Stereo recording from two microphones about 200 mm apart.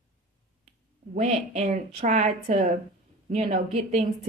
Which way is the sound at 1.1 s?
35° right (ahead or behind).